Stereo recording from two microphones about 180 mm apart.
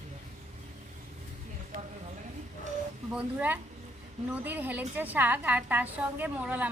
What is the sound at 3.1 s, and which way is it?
A woman's voice, 10° right (ahead or behind).